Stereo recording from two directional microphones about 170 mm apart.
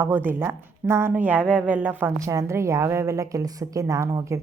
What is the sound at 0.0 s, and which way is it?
A woman's voice, 10° right (ahead or behind).